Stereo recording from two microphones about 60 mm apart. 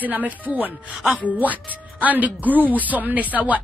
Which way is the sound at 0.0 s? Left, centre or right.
Right.